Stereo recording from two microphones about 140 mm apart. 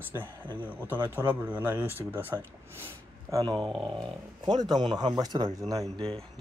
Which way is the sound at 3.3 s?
30° right (ahead or behind).